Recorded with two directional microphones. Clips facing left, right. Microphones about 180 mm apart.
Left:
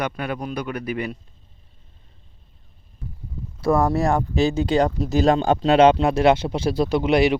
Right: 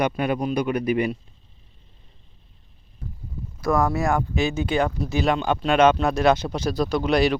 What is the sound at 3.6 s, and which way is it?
Speech, 30° left (ahead or behind).